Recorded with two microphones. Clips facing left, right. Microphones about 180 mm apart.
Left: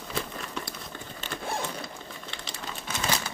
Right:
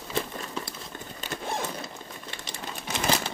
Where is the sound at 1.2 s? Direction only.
20° right (ahead or behind).